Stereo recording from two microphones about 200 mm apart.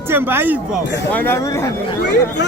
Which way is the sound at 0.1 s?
10° right (ahead or behind).